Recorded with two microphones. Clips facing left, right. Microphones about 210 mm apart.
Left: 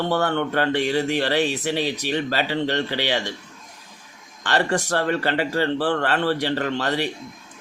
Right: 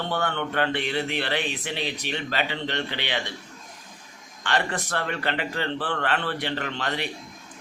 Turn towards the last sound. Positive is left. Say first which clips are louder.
# left 6 dB
turn(degrees=40)  # may be behind; listen again after turning